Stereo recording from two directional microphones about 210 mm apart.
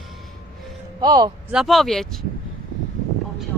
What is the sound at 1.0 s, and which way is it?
Speech, 20° right (ahead or behind).